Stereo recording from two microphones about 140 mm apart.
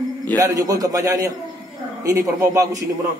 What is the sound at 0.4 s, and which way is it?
A man's voice, 25° right (ahead or behind).